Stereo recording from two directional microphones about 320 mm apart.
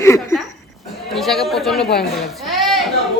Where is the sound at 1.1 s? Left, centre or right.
Centre.